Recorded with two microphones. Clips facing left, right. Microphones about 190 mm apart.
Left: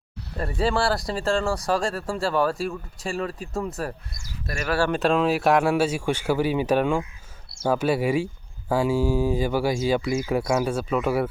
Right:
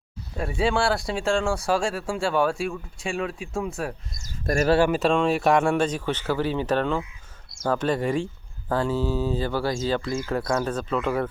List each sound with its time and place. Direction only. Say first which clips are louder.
0.3 s speech: even; centre (ahead or behind)
4.5 s speech: right 9 dB; 50° right (ahead or behind)
4.9 s speech: even; centre (ahead or behind)